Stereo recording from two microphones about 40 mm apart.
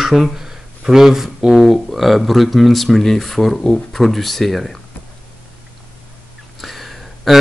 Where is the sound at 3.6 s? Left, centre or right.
Left.